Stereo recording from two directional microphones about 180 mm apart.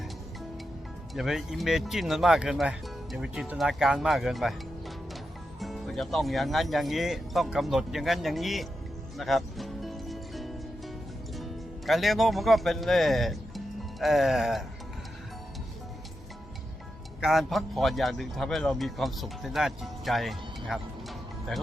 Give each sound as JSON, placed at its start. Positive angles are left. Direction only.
{"t": 1.1, "sound": "speech", "side_deg": 0}
{"t": 5.5, "sound": "speech", "side_deg": 0}
{"t": 9.1, "sound": "music", "side_deg": 0}
{"t": 11.9, "sound": "speech", "side_deg": 0}
{"t": 17.2, "sound": "a man's voice", "side_deg": 0}